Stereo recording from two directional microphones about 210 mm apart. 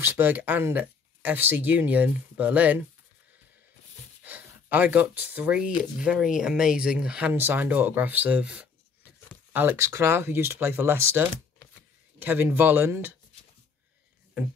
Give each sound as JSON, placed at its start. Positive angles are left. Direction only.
{"t": 0.0, "sound": "speech", "side_deg": -10}
{"t": 4.2, "sound": "speech", "side_deg": -10}